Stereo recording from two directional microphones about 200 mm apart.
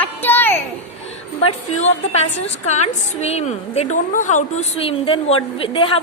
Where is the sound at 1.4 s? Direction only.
35° left (ahead or behind).